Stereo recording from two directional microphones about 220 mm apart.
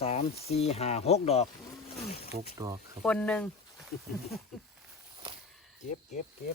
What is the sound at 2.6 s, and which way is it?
Speech, 15° right (ahead or behind).